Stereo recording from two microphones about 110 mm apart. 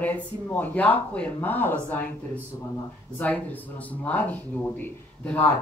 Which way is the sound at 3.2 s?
15° left (ahead or behind).